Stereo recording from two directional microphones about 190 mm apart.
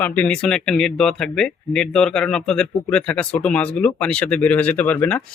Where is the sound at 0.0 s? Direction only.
10° left (ahead or behind).